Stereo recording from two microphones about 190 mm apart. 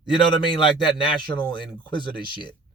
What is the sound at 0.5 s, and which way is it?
Speech, 25° left (ahead or behind).